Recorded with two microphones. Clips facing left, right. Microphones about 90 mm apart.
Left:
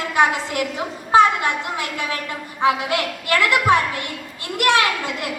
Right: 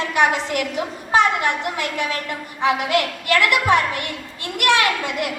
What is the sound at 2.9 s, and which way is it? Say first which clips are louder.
Speech: right 2 dB; 20° left (ahead or behind).